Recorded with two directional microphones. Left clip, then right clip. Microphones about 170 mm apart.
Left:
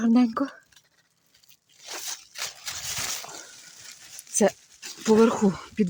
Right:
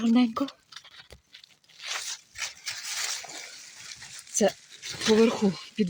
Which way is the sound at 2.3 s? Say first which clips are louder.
Even; 60° left (ahead or behind).